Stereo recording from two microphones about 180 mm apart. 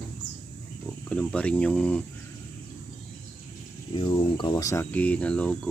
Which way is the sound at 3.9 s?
30° left (ahead or behind).